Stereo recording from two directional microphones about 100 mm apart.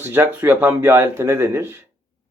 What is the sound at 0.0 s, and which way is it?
Speech, 20° right (ahead or behind).